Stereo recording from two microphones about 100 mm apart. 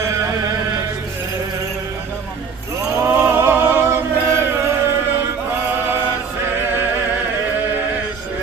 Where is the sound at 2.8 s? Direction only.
25° right (ahead or behind).